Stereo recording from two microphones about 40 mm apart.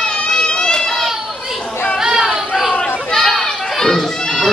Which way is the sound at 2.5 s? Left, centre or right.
Centre.